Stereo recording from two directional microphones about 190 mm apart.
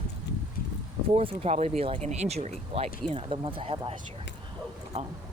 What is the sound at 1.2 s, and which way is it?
Speech, 30° right (ahead or behind).